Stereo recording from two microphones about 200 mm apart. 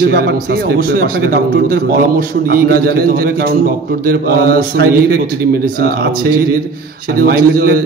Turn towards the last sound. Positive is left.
turn(degrees=-50)  # may be behind; listen again after turning